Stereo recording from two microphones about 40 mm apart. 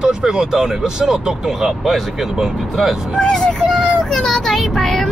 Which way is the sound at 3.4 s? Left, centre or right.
Centre.